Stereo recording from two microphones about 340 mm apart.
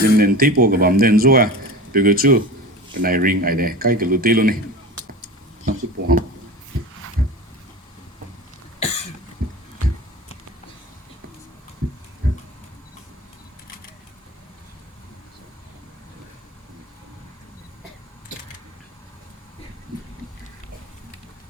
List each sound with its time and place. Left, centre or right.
0.0 s speech: right
5.6 s speech: right
8.8 s cough: centre
9.4 s heart sounds: right
12.2 s pig: right